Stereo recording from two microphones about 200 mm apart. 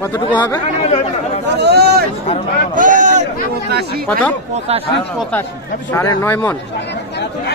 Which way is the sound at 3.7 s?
50° right (ahead or behind).